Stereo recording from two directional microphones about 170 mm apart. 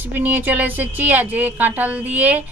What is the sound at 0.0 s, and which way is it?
A woman's voice, 10° right (ahead or behind).